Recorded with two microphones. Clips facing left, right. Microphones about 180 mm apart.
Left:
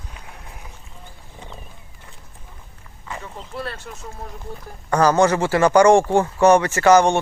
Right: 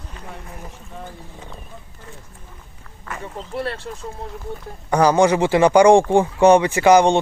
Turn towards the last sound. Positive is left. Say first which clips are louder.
# right 1 dB
turn(degrees=-15)  # may be behind; listen again after turning